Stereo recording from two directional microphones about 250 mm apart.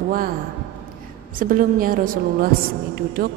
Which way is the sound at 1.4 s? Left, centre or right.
Right.